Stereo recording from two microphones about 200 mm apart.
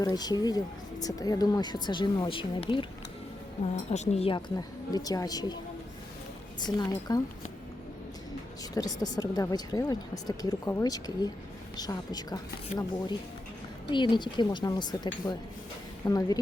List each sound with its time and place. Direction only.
0.0 s speech: 20° left (ahead or behind)
3.8 s speech: 35° left (ahead or behind)
6.7 s speech: 20° left (ahead or behind)
8.7 s speech: 20° left (ahead or behind)
13.9 s a woman's voice: 25° left (ahead or behind)